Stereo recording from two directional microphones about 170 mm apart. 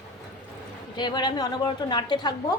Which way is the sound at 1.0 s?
25° left (ahead or behind).